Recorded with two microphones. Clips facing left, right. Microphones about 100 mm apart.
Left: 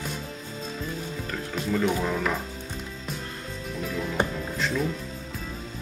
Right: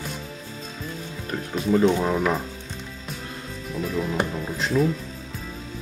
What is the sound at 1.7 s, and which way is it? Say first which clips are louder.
Speech: right 7 dB; 25° right (ahead or behind).